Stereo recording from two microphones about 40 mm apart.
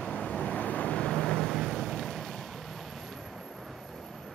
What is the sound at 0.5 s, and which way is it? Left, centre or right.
Vehicle, left.